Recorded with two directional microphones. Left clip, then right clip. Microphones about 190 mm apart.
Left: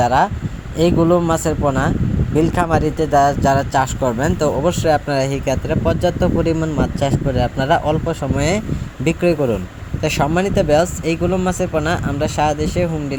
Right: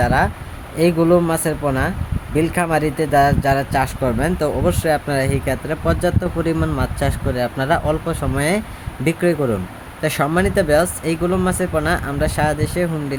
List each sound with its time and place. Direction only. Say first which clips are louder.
0.0 s speech: left 3 dB; 15° left (ahead or behind)